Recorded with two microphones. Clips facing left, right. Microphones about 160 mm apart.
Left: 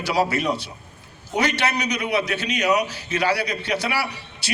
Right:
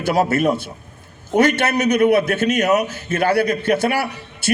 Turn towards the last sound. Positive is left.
turn(degrees=-50)  # may be behind; listen again after turning